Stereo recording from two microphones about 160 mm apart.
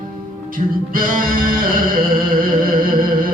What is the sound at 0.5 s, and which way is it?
Music, 60° right (ahead or behind).